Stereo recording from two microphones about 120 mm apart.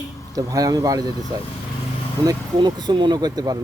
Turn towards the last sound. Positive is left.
turn(degrees=-35)  # may be behind; listen again after turning